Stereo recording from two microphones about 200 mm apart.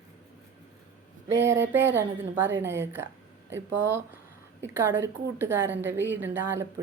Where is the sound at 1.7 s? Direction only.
10° right (ahead or behind).